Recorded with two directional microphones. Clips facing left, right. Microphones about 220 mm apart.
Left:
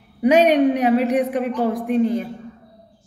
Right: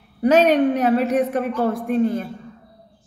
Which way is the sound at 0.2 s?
15° left (ahead or behind).